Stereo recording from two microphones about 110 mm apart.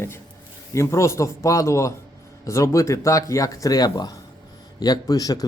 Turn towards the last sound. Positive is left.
turn(degrees=35)  # may be behind; listen again after turning